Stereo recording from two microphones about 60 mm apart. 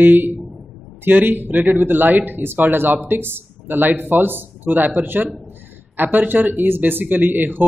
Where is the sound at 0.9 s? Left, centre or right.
Right.